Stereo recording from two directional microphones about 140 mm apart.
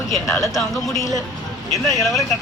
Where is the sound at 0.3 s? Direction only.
20° left (ahead or behind).